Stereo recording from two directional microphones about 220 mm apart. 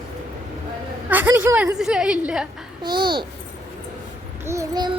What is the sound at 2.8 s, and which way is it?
Speech, 20° right (ahead or behind).